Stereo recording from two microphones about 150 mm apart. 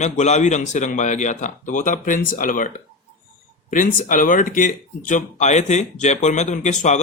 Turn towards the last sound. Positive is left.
turn(degrees=50)  # may be behind; listen again after turning